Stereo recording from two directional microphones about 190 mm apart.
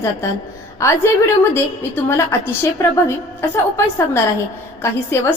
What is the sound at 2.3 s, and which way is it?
A woman's voice, 15° left (ahead or behind).